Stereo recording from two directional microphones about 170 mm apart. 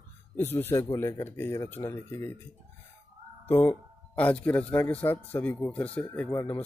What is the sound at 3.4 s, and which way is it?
Speech, 10° left (ahead or behind).